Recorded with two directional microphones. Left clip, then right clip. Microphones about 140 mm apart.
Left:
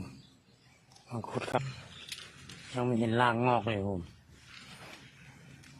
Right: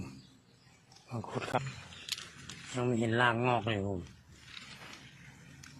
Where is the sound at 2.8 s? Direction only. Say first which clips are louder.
Left 1 dB; 30° left (ahead or behind).